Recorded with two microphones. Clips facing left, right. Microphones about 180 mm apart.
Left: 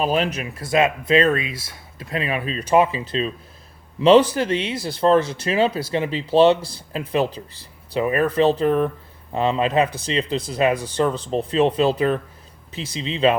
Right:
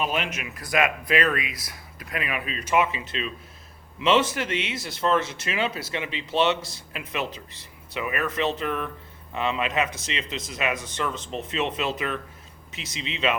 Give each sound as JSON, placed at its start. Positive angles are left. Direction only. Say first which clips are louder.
{"t": 0.0, "sound": "speech", "louder": "left 7 dB", "side_deg": 35}